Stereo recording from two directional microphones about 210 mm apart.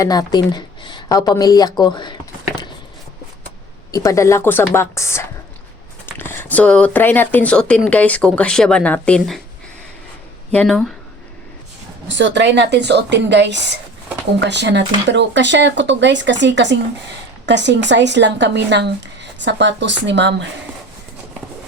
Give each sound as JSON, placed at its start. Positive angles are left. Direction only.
{"t": 0.0, "sound": "speech", "side_deg": 20}
{"t": 3.9, "sound": "speech", "side_deg": 15}
{"t": 10.5, "sound": "speech", "side_deg": 0}
{"t": 12.0, "sound": "speech", "side_deg": -60}